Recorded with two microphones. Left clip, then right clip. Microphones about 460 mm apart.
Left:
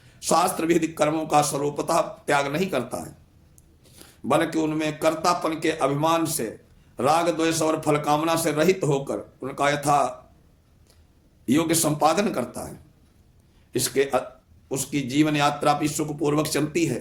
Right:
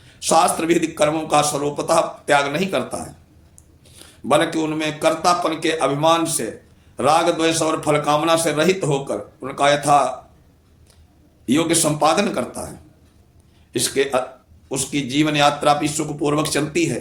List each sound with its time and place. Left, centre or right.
0.0 s a man's voice: left
11.4 s a man's voice: left
13.7 s a man's voice: left